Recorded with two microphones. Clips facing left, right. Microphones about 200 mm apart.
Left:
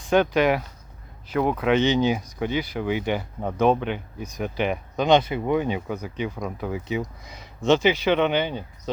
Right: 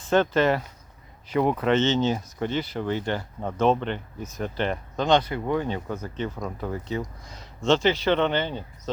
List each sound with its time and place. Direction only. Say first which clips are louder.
0.0 s speech: left 1 dB; 15° left (ahead or behind)